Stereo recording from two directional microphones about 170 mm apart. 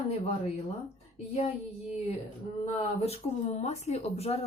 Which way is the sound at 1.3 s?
40° left (ahead or behind).